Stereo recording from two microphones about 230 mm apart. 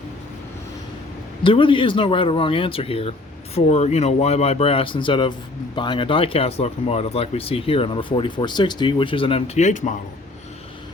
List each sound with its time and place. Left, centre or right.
1.5 s speech: left